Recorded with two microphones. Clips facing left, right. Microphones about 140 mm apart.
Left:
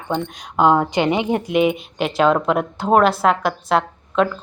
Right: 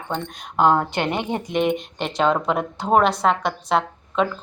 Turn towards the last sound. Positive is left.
turn(degrees=0)  # may be behind; listen again after turning